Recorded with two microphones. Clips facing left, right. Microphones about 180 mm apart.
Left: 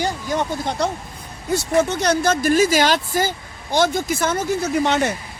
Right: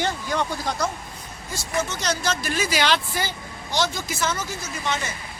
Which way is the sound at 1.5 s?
65° left (ahead or behind).